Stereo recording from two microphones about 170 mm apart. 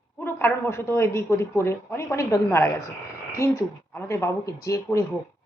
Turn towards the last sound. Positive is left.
turn(degrees=20)  # may be behind; listen again after turning